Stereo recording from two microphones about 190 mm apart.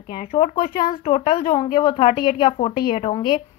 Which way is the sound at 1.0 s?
30° left (ahead or behind).